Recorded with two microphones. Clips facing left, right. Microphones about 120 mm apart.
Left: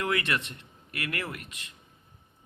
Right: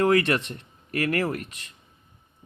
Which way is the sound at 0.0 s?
40° right (ahead or behind).